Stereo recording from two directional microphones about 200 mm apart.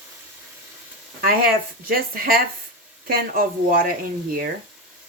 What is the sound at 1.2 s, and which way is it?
Speech, 45° right (ahead or behind).